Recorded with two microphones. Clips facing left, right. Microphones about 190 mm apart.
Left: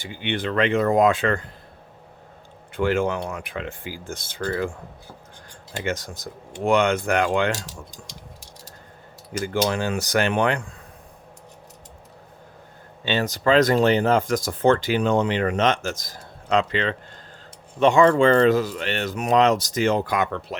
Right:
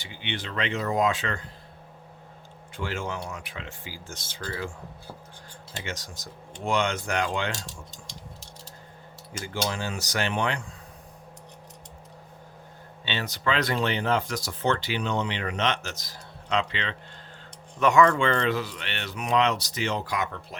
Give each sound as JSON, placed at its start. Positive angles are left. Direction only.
{"t": 0.0, "sound": "speech", "side_deg": 50}
{"t": 2.7, "sound": "speech", "side_deg": 60}
{"t": 5.7, "sound": "speech", "side_deg": 55}
{"t": 9.4, "sound": "speech", "side_deg": 55}
{"t": 13.1, "sound": "speech", "side_deg": 45}
{"t": 17.7, "sound": "speech", "side_deg": 30}